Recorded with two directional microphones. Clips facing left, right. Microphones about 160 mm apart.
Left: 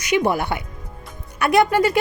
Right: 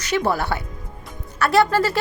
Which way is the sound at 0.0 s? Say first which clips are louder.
Left 2 dB; 15° left (ahead or behind).